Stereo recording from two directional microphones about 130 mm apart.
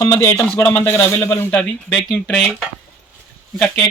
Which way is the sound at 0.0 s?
20° left (ahead or behind).